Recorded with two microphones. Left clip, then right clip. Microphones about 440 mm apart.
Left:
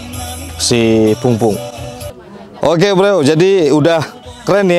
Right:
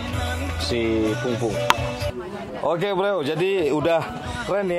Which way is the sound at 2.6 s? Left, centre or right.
Left.